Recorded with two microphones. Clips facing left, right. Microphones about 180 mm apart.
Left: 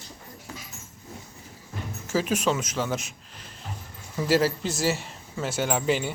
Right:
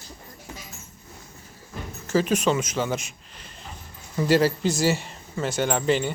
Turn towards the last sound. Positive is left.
turn(degrees=5)  # may be behind; listen again after turning